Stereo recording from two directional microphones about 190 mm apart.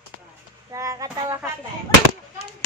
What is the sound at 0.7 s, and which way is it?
Speech, 15° right (ahead or behind).